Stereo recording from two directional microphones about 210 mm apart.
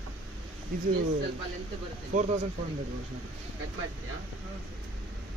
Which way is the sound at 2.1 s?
35° right (ahead or behind).